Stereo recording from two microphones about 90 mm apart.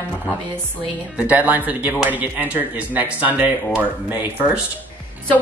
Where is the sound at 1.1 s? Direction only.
15° right (ahead or behind).